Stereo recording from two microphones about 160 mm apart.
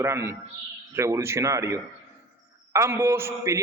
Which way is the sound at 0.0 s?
15° right (ahead or behind).